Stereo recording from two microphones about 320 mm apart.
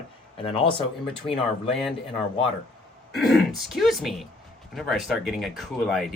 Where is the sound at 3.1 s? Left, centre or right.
Centre.